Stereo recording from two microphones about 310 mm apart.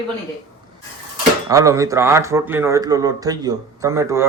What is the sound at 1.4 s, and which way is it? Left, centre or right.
Speech, centre.